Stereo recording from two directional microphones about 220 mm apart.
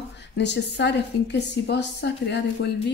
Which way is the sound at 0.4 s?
50° left (ahead or behind).